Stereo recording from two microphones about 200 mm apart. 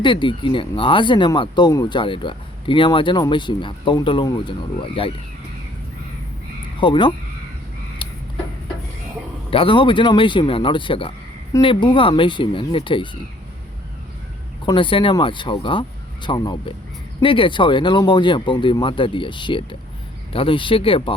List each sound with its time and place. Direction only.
0.0 s speech: 25° left (ahead or behind)
6.7 s speech: 25° left (ahead or behind)
8.0 s a sound: 25° left (ahead or behind)
9.5 s speech: 25° left (ahead or behind)
14.6 s speech: 25° left (ahead or behind)